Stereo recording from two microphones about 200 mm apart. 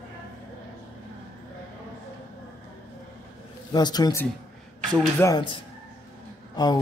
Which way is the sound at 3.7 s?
20° left (ahead or behind).